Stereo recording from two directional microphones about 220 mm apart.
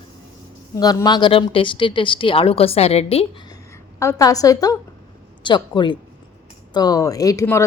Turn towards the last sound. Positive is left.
turn(degrees=15)  # may be behind; listen again after turning